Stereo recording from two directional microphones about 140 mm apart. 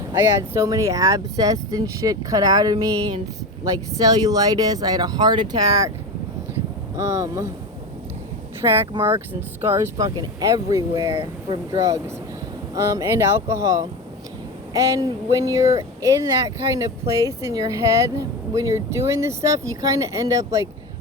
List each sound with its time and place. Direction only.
0.1 s speech: 20° right (ahead or behind)
6.9 s speech: 25° right (ahead or behind)
8.6 s speech: 30° right (ahead or behind)
9.0 s speech: 15° right (ahead or behind)
11.2 s speech: 35° right (ahead or behind)
11.8 s speech: 25° right (ahead or behind)